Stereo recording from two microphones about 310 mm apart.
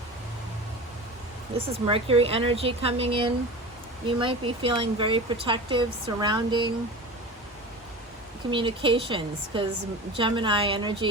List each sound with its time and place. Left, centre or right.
1.9 s speech: centre
8.4 s speech: centre